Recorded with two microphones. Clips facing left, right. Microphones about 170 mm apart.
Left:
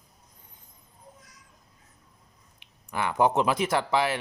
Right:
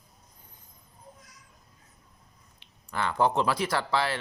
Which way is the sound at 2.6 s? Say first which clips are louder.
Left 1 dB; 15° left (ahead or behind).